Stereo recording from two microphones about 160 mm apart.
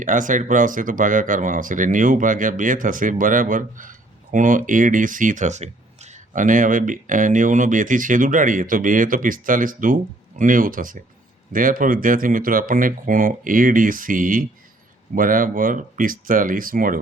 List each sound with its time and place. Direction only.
0.0 s speech: 55° right (ahead or behind)